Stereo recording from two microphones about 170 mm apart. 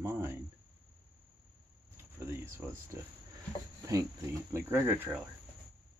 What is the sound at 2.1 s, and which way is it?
Speech, 15° right (ahead or behind).